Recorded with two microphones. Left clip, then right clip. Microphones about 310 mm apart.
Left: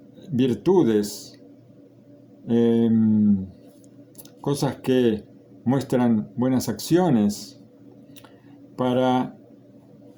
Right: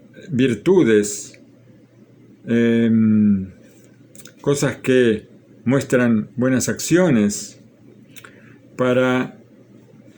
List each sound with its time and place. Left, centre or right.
0.2 s speech: left
2.5 s speech: left
4.4 s speech: left
8.7 s speech: left